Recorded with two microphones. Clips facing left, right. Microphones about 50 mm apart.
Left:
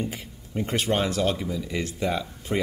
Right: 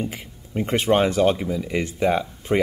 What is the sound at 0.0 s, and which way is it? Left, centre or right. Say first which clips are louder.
Speech: right 2 dB; right.